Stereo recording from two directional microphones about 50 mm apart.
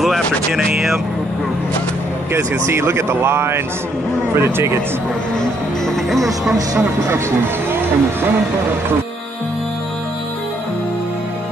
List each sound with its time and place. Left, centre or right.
2.3 s speech: right
5.9 s speech: centre
6.8 s speech: right